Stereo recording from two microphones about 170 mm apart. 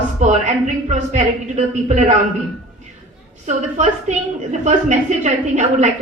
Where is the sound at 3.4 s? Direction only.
45° right (ahead or behind).